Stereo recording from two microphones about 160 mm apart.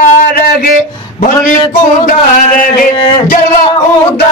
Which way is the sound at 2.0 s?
60° left (ahead or behind).